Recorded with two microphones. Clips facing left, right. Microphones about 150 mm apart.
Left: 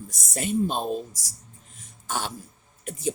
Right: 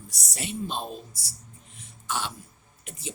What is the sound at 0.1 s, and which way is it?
Speech, 45° left (ahead or behind).